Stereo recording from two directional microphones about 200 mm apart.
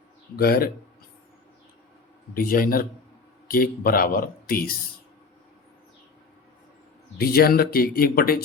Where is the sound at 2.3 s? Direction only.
45° left (ahead or behind).